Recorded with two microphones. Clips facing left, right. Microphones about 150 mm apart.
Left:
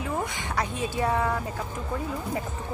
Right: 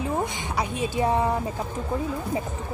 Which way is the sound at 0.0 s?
25° right (ahead or behind).